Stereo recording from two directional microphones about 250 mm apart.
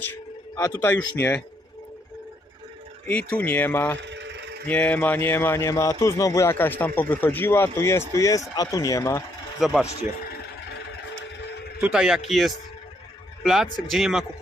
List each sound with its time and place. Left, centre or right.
0.6 s speech: centre
3.1 s speech: centre
4.0 s vehicle: right
4.6 s speech: centre
9.6 s speech: centre
11.8 s a man's voice: centre